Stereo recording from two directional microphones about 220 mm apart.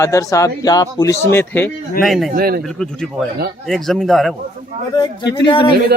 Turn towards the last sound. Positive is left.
turn(degrees=20)  # may be behind; listen again after turning